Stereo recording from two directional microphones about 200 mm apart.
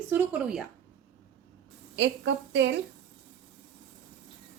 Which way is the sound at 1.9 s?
65° right (ahead or behind).